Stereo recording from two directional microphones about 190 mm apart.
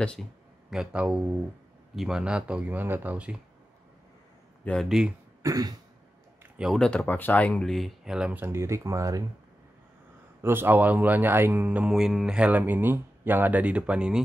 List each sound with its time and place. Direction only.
0.0 s speech: 5° left (ahead or behind)
4.6 s speech: centre (ahead or behind)
5.4 s cough: 20° right (ahead or behind)
6.4 s speech: centre (ahead or behind)
10.4 s speech: 10° right (ahead or behind)